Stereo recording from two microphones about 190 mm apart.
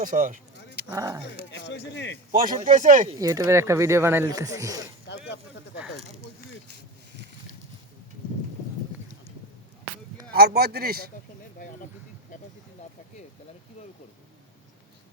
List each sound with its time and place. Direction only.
0.0 s speech: 45° right (ahead or behind)
0.9 s speech: 15° right (ahead or behind)
1.5 s speech: 65° left (ahead or behind)
2.3 s speech: 40° right (ahead or behind)
3.2 s speech: 15° right (ahead or behind)
5.0 s speech: 65° left (ahead or behind)
10.3 s speech: 55° right (ahead or behind)